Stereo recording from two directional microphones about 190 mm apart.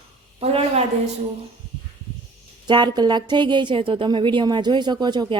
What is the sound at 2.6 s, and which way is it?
A woman's voice, 25° right (ahead or behind).